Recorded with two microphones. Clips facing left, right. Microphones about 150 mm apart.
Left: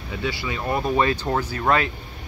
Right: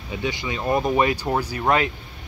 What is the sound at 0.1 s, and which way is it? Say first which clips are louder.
Speech: right 1 dB; 20° right (ahead or behind).